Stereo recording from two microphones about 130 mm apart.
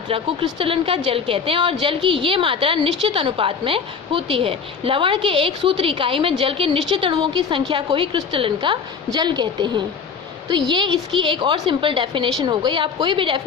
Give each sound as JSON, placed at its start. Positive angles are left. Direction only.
{"t": 0.1, "sound": "a woman's voice", "side_deg": -40}